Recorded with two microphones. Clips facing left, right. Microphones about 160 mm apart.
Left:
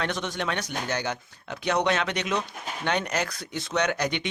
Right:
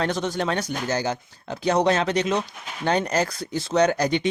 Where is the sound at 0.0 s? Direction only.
35° right (ahead or behind).